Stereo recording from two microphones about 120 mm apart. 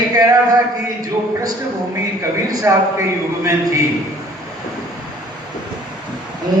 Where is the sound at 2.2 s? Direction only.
25° right (ahead or behind).